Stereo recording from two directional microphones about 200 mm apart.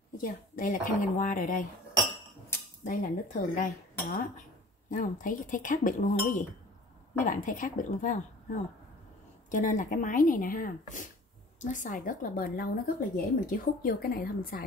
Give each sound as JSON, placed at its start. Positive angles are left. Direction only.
{"t": 0.2, "sound": "speech", "side_deg": 45}
{"t": 2.8, "sound": "speech", "side_deg": 40}
{"t": 4.8, "sound": "speech", "side_deg": 40}